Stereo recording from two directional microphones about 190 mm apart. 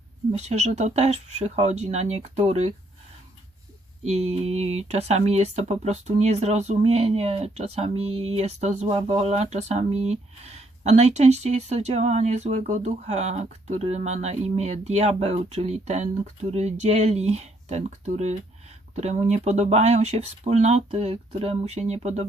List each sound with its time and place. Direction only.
0.3 s speech: 35° right (ahead or behind)
4.0 s speech: 35° right (ahead or behind)